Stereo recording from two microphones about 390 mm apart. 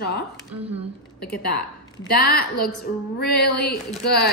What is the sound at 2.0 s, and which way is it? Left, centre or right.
A woman's voice, left.